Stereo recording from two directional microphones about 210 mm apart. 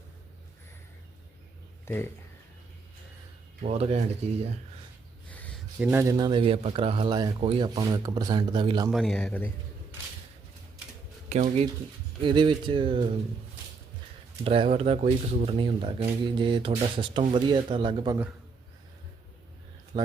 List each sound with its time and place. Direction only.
1.8 s speech: 10° left (ahead or behind)
3.6 s speech: 30° right (ahead or behind)
5.8 s a man's voice: 10° right (ahead or behind)
8.9 s speech: centre (ahead or behind)
11.3 s a man's voice: 30° right (ahead or behind)
14.4 s a man's voice: 25° right (ahead or behind)